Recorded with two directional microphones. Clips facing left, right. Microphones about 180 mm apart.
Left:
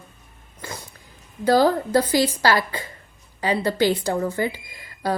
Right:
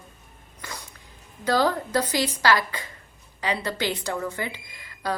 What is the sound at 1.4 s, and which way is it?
Speech, 30° left (ahead or behind).